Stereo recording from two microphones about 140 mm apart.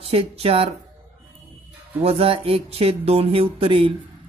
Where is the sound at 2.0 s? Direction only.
45° right (ahead or behind).